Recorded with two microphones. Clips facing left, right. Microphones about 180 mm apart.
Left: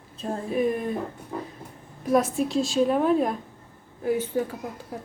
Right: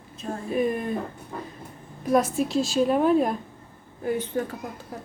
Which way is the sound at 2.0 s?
Centre (ahead or behind).